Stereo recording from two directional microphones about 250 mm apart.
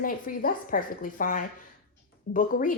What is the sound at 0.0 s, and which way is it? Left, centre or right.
A woman's voice, left.